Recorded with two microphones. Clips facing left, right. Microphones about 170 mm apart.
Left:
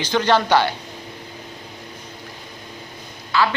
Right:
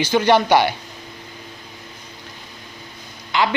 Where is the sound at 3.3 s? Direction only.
20° right (ahead or behind).